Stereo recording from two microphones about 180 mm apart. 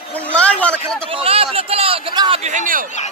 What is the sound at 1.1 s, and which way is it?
Speech, 30° right (ahead or behind).